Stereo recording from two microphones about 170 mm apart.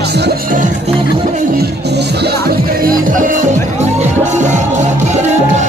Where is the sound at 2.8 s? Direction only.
50° right (ahead or behind).